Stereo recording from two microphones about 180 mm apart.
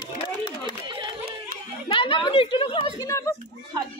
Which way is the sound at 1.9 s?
30° left (ahead or behind).